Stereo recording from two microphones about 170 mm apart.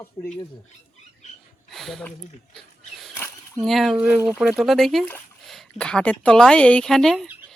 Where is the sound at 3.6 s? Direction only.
Centre (ahead or behind).